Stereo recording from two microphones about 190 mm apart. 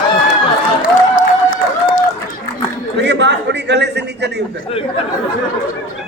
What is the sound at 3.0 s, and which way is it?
A man's voice, 65° right (ahead or behind).